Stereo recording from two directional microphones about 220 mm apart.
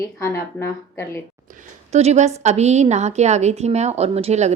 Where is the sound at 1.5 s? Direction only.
35° right (ahead or behind).